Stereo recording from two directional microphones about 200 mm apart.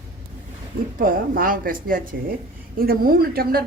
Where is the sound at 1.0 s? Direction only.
45° right (ahead or behind).